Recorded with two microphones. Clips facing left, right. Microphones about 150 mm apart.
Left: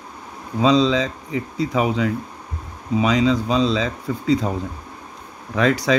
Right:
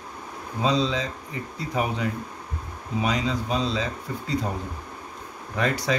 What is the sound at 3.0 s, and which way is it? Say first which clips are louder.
Speech: left 8 dB; 90° left.